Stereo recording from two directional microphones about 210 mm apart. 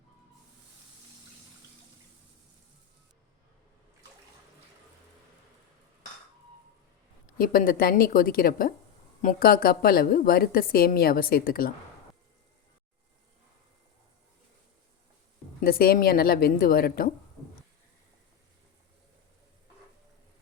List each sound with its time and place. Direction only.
7.3 s a woman's voice: 45° left (ahead or behind)
15.6 s a woman's voice: 45° left (ahead or behind)